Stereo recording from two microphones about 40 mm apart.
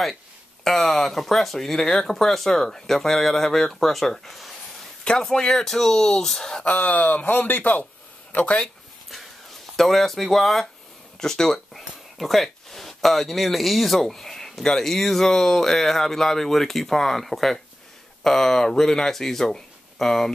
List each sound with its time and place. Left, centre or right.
0.7 s speech: centre
5.4 s speech: centre
6.6 s speech: left
8.3 s speech: left
9.8 s speech: centre